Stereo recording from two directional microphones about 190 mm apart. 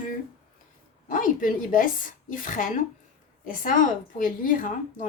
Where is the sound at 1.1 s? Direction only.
45° left (ahead or behind).